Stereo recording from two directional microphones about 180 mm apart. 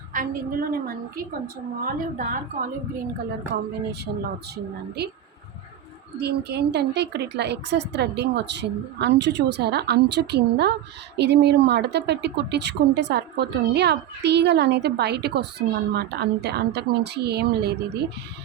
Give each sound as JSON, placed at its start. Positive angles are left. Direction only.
{"t": 0.1, "sound": "a woman's voice", "side_deg": -50}
{"t": 4.0, "sound": "a woman's voice", "side_deg": -65}
{"t": 6.1, "sound": "speech", "side_deg": -65}